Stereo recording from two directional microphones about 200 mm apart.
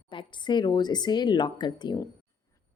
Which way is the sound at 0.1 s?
25° left (ahead or behind).